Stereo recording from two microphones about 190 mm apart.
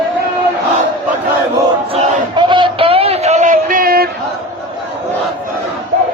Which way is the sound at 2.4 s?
25° right (ahead or behind).